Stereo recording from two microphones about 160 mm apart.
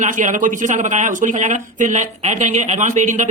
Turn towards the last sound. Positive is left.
turn(degrees=-50)  # may be behind; listen again after turning